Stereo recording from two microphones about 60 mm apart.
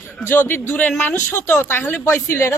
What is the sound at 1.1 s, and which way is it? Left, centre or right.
Speech, left.